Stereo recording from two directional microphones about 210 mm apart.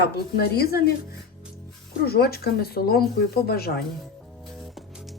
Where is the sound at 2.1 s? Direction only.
50° left (ahead or behind).